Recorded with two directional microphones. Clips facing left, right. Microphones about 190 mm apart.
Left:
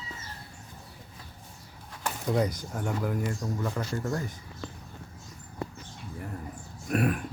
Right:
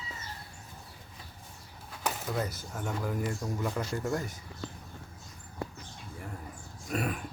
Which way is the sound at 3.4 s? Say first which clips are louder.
Left 1 dB; 5° right (ahead or behind).